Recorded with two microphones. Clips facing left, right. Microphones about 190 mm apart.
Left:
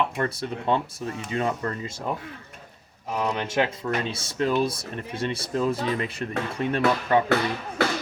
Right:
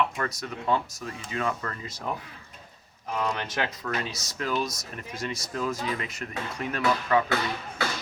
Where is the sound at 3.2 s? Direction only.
20° left (ahead or behind).